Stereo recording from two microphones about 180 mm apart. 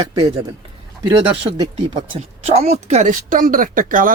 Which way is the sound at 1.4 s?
25° right (ahead or behind).